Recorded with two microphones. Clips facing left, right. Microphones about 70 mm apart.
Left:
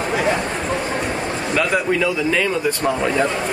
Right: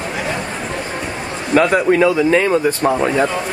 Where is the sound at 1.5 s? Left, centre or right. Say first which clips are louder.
Right 7 dB; right.